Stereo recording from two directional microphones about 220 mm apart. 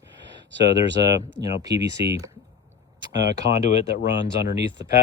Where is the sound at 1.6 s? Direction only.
15° right (ahead or behind).